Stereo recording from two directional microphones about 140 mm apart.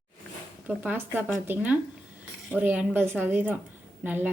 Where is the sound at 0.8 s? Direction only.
15° right (ahead or behind).